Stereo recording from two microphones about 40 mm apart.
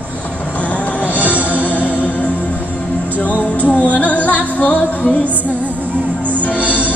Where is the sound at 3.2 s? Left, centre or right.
Left.